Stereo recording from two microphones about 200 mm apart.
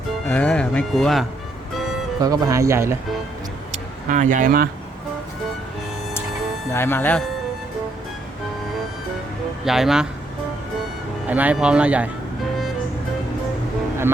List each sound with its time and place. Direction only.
0.3 s speech: 5° left (ahead or behind)
2.2 s speech: 15° right (ahead or behind)
3.7 s speech: 40° right (ahead or behind)
6.7 s speech: 10° left (ahead or behind)
9.6 s speech: centre (ahead or behind)
11.3 s speech: 5° right (ahead or behind)